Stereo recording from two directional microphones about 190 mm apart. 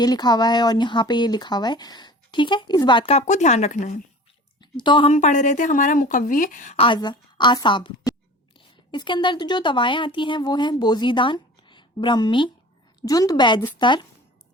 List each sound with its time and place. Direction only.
0.0 s speech: 20° left (ahead or behind); by 4.0 s 40° left (ahead or behind)
4.8 s speech: 25° left (ahead or behind)
5.1 s a woman's voice: 40° left (ahead or behind)
6.7 s a woman's voice: 25° left (ahead or behind)